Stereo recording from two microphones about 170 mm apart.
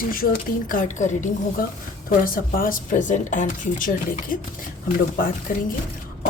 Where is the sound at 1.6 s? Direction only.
55° left (ahead or behind).